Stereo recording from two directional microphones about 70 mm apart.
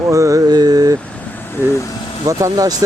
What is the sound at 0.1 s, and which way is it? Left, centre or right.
Mantra, right.